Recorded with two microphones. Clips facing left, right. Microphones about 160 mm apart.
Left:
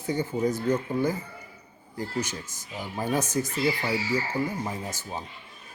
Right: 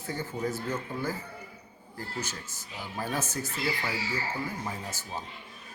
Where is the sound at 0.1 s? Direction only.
15° left (ahead or behind).